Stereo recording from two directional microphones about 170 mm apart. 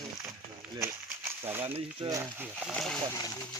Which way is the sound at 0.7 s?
15° right (ahead or behind).